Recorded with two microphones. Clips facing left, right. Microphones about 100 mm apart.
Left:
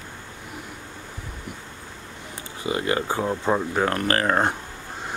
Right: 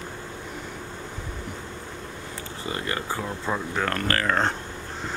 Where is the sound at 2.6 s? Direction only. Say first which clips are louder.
Left 6 dB; 15° left (ahead or behind).